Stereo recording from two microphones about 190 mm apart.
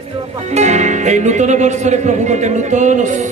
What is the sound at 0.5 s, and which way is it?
Speech, 35° right (ahead or behind).